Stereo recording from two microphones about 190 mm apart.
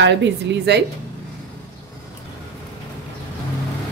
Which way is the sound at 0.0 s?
70° right (ahead or behind).